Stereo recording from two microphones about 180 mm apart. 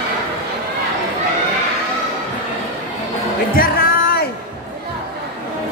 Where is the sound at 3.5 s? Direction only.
55° left (ahead or behind).